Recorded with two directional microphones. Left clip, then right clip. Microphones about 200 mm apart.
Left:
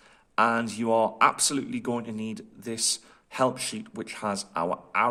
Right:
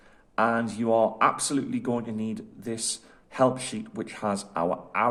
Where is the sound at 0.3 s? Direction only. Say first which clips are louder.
Left 1 dB; 20° left (ahead or behind).